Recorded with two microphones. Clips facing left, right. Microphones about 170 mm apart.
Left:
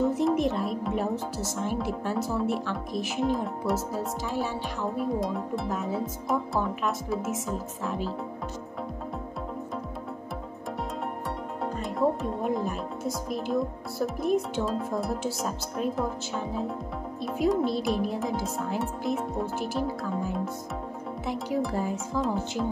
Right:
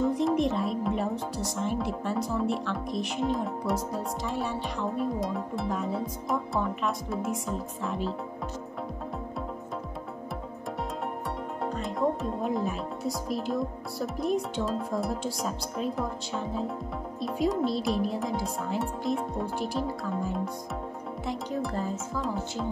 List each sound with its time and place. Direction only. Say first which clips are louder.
0.0 s speech: left 1 dB; 5° left (ahead or behind)
11.6 s speech: left 2 dB; centre (ahead or behind)